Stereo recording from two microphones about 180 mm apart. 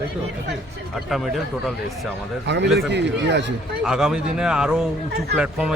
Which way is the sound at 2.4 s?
75° right (ahead or behind).